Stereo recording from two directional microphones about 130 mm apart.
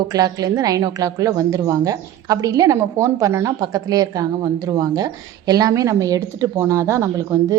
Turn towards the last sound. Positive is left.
turn(degrees=-25)  # may be behind; listen again after turning